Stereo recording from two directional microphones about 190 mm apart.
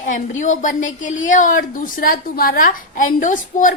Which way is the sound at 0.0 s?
40° left (ahead or behind).